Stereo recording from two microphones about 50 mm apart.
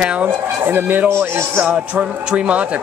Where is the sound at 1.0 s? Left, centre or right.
Right.